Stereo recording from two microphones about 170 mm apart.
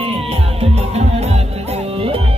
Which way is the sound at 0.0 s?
35° right (ahead or behind).